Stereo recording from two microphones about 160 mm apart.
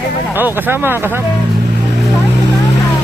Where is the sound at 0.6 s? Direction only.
15° right (ahead or behind).